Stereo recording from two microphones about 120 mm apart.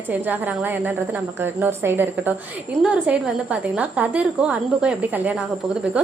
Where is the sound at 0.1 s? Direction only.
15° right (ahead or behind).